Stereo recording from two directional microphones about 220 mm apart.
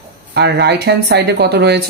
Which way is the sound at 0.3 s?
50° right (ahead or behind).